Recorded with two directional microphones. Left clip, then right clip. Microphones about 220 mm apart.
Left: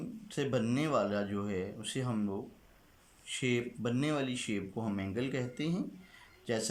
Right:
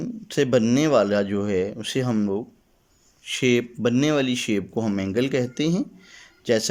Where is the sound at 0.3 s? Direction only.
45° right (ahead or behind).